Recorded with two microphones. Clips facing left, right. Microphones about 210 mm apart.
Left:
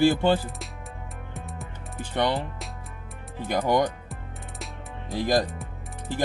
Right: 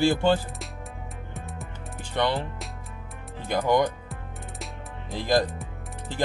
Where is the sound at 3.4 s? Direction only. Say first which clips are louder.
Even; 15° left (ahead or behind).